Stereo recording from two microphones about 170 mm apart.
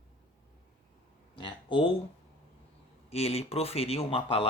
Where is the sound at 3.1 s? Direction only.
35° left (ahead or behind).